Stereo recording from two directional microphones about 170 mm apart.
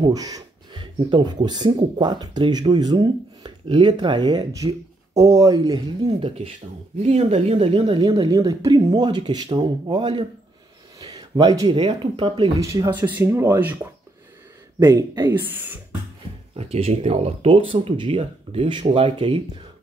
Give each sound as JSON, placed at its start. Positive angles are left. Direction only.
{"t": 0.0, "sound": "a sound", "side_deg": -20}
{"t": 0.9, "sound": "speech", "side_deg": -25}
{"t": 6.0, "sound": "speech", "side_deg": -35}
{"t": 11.0, "sound": "a sound", "side_deg": -25}
{"t": 11.8, "sound": "speech", "side_deg": -30}
{"t": 12.5, "sound": "speech", "side_deg": -20}
{"t": 14.8, "sound": "speech", "side_deg": -20}
{"t": 16.5, "sound": "speech", "side_deg": -35}